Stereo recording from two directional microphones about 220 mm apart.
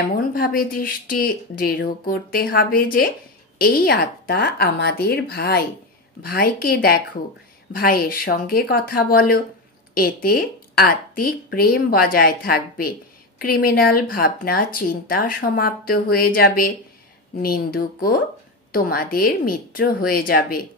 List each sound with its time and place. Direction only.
0.3 s speech: 40° left (ahead or behind)